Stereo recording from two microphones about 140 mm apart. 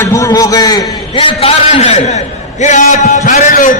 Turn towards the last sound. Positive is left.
turn(degrees=70)  # may be behind; listen again after turning